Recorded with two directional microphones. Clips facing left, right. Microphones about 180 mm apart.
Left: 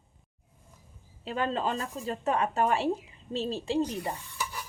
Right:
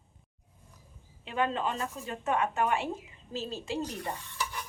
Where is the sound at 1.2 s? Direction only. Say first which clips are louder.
Left 1 dB; 35° left (ahead or behind).